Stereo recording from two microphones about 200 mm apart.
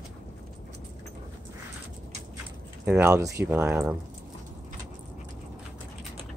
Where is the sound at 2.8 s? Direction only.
10° right (ahead or behind).